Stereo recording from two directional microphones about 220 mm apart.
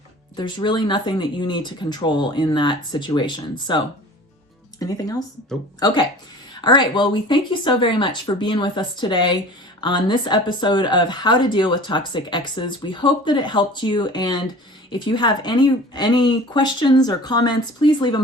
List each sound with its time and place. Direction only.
0.3 s speech: 20° left (ahead or behind)
5.8 s speech: 20° left (ahead or behind)